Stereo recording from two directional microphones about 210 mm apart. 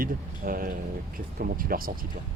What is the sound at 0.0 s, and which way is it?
Speech, 45° right (ahead or behind).